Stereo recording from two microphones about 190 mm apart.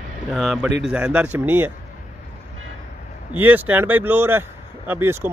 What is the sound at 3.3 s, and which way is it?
Speech, 10° right (ahead or behind).